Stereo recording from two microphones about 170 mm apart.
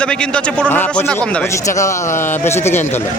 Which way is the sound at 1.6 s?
20° left (ahead or behind).